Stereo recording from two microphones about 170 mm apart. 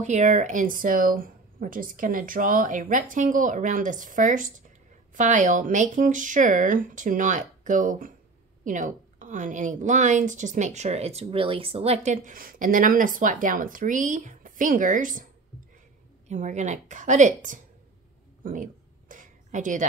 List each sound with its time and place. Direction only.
0.0 s a woman's voice: 45° right (ahead or behind)
16.3 s a woman's voice: 45° right (ahead or behind)
18.4 s a sound: 50° right (ahead or behind)